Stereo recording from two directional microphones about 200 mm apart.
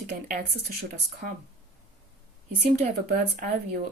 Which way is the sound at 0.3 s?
45° right (ahead or behind).